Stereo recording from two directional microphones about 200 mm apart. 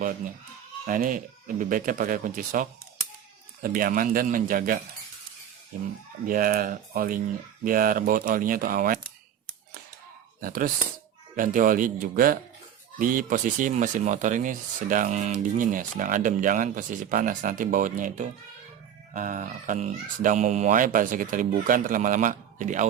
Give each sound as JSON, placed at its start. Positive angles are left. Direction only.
{"t": 0.9, "sound": "speech", "side_deg": -45}
{"t": 6.2, "sound": "speech", "side_deg": -45}
{"t": 10.4, "sound": "speech", "side_deg": -45}